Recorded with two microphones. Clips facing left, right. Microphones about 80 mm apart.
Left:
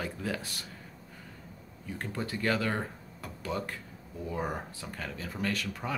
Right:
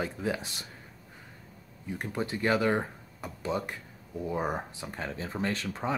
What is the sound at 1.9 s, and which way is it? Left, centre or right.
Speech, right.